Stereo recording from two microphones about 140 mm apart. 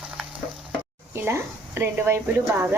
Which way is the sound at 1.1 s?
15° right (ahead or behind).